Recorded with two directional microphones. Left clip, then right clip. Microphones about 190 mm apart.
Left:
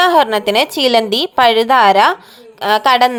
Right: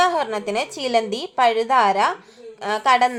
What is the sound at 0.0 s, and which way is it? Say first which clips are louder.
A woman's voice: left 9 dB; 40° left (ahead or behind).